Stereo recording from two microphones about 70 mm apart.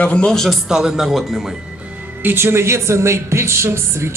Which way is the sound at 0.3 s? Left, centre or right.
Centre.